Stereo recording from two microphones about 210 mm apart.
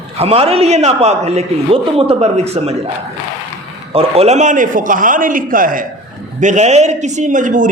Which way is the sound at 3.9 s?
30° right (ahead or behind).